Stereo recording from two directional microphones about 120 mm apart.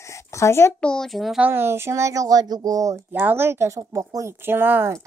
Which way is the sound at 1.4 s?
20° right (ahead or behind).